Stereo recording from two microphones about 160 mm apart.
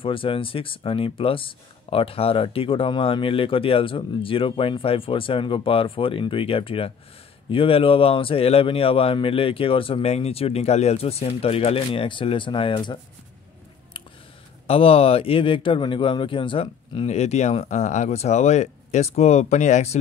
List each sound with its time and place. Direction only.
0.0 s speech: 35° left (ahead or behind)
14.7 s speech: 35° left (ahead or behind)